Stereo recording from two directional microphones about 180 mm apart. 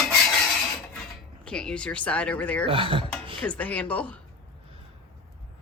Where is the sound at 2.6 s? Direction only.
30° right (ahead or behind).